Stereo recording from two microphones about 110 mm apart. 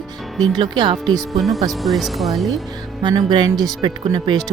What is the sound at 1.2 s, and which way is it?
Speech, centre (ahead or behind).